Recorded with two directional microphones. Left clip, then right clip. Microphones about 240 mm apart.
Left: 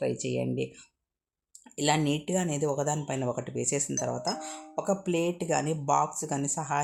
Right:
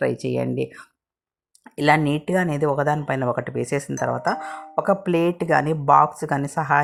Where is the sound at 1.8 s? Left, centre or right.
Centre.